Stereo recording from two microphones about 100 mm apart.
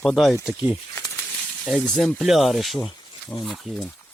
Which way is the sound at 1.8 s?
10° left (ahead or behind).